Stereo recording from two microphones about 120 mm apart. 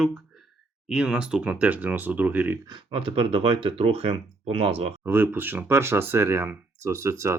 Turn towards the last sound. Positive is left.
turn(degrees=-25)  # may be behind; listen again after turning